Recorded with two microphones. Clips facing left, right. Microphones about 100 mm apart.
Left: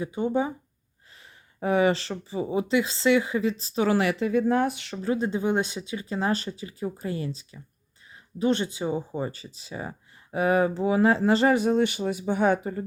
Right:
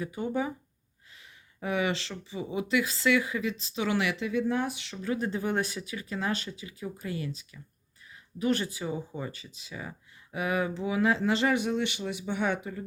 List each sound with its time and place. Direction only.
0.0 s speech: 25° left (ahead or behind)
1.6 s speech: 35° left (ahead or behind); by 4.9 s 50° left (ahead or behind)
5.0 s speech: 25° left (ahead or behind); by 12.8 s 40° left (ahead or behind)